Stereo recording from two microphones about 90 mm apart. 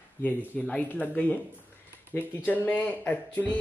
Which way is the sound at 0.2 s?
15° left (ahead or behind).